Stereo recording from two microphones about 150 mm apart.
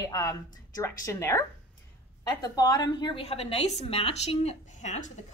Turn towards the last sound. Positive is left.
turn(degrees=50)  # may be behind; listen again after turning